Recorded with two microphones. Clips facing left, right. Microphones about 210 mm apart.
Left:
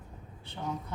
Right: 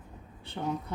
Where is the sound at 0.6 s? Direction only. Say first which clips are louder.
Right 4 dB; 80° right.